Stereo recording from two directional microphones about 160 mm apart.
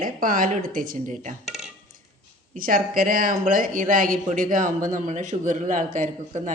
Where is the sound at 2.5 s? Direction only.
60° right (ahead or behind).